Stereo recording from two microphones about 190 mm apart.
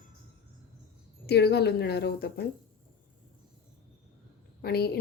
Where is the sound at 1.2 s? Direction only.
60° left (ahead or behind).